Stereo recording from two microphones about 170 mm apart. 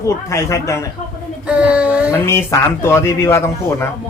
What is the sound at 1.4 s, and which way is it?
Speech, 5° right (ahead or behind).